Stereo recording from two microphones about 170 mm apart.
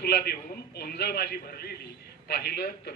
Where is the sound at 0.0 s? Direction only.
65° left (ahead or behind).